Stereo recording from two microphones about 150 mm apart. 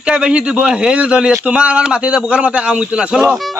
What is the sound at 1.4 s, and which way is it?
A man's voice, 10° right (ahead or behind).